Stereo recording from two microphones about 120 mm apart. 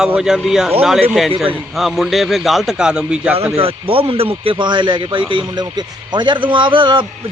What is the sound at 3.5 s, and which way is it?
Speech, 50° right (ahead or behind).